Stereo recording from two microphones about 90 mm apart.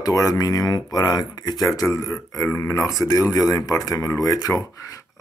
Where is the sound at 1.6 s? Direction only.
35° left (ahead or behind).